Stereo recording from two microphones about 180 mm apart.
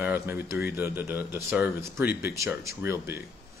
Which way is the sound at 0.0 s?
10° right (ahead or behind).